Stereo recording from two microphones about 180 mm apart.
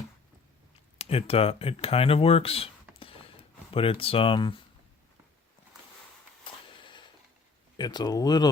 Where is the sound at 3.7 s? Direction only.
30° left (ahead or behind).